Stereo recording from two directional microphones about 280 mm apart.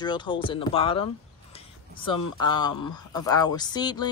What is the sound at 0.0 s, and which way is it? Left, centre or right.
Speech, centre.